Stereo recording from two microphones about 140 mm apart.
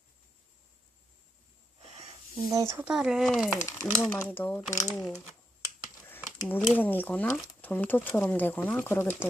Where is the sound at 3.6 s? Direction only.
20° left (ahead or behind).